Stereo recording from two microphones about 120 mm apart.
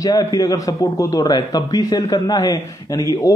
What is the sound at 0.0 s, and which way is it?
A man's voice, 30° left (ahead or behind).